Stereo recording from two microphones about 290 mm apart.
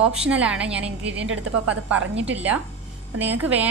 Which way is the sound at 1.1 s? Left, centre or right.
Right.